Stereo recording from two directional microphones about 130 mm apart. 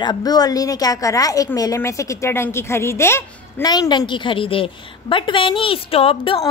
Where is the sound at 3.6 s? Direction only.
30° left (ahead or behind).